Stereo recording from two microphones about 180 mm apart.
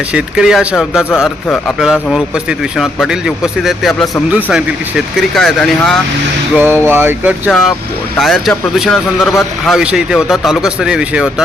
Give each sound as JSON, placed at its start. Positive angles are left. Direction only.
{"t": 0.1, "sound": "speech", "side_deg": -5}
{"t": 6.6, "sound": "a sound", "side_deg": -10}
{"t": 8.2, "sound": "speech", "side_deg": 0}